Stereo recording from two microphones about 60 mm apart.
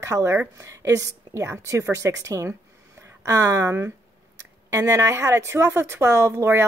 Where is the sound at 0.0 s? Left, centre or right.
Right.